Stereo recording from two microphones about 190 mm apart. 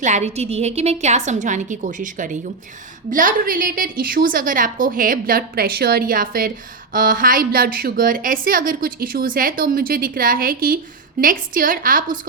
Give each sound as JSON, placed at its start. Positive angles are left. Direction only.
{"t": 0.0, "sound": "a woman's voice", "side_deg": -40}